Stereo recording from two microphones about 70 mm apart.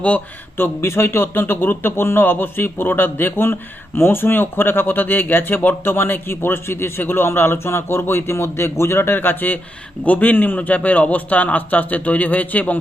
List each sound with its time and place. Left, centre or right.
0.5 s a man's voice: left